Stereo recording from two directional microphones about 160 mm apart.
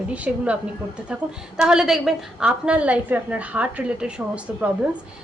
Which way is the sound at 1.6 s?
5° right (ahead or behind).